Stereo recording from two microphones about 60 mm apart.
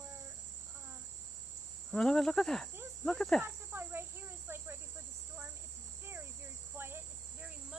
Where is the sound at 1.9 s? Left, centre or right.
Centre.